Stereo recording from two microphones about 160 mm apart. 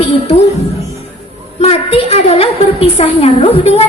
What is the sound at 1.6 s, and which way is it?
A woman's voice, 40° left (ahead or behind).